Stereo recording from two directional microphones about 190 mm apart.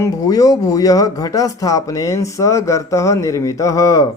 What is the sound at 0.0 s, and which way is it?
Speech, 15° left (ahead or behind).